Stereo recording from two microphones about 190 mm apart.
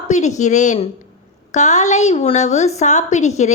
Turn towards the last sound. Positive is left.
turn(degrees=40)  # may be behind; listen again after turning